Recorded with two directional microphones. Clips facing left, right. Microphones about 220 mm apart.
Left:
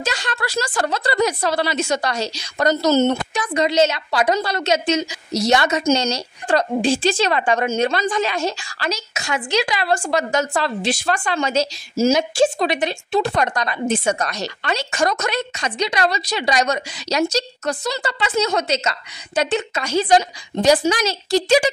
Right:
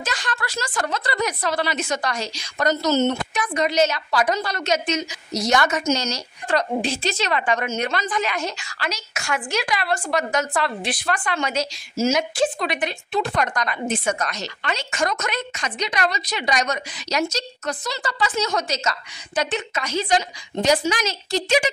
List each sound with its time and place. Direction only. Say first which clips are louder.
0.0 s a woman's voice: left 4 dB; 30° left (ahead or behind)
2.9 s speech: left 4 dB; 55° left (ahead or behind)
3.3 s a woman's voice: left 3 dB; 25° left (ahead or behind)
9.1 s a woman's voice: left 3 dB; 20° left (ahead or behind)